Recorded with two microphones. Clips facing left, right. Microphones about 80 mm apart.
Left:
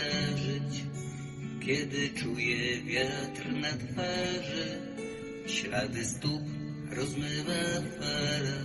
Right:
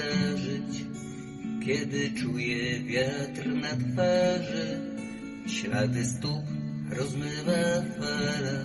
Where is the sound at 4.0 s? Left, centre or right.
Right.